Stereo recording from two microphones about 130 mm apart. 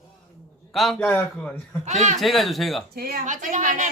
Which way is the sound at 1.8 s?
65° right (ahead or behind).